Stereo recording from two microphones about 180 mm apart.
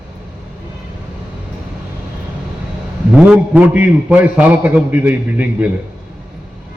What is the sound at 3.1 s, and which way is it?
A man's voice, 5° right (ahead or behind).